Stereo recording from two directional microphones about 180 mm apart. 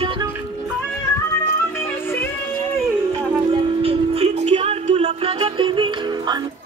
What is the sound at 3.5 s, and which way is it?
Music, 30° right (ahead or behind).